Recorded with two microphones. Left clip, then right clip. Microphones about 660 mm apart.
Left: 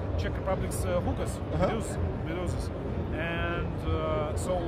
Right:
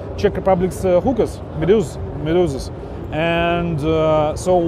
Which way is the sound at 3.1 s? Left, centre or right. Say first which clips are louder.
Right 16 dB; right.